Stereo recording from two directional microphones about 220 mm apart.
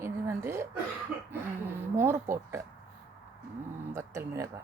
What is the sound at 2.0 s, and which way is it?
Speech, 10° right (ahead or behind).